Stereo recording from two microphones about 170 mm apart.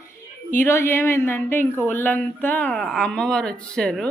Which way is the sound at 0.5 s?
15° left (ahead or behind).